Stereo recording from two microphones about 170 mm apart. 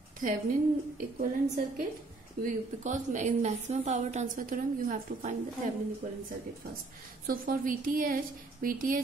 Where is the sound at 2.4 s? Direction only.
45° right (ahead or behind).